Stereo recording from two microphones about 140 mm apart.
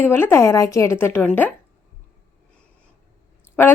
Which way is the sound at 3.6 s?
15° left (ahead or behind).